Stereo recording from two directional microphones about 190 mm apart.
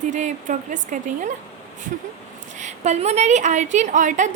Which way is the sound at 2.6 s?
35° right (ahead or behind).